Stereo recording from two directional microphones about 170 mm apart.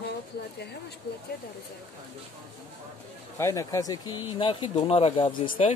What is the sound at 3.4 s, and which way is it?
Speech, 20° left (ahead or behind).